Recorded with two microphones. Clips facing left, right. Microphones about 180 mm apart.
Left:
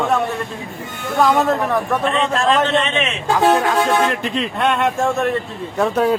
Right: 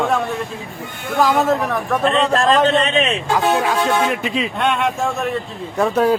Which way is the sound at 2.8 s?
35° right (ahead or behind).